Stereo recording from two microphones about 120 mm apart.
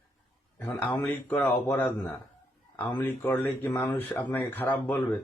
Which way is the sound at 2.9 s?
20° left (ahead or behind).